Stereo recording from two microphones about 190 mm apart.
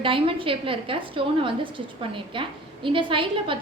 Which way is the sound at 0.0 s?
30° right (ahead or behind).